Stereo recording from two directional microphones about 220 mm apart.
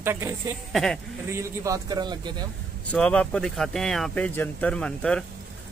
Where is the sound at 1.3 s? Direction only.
15° right (ahead or behind).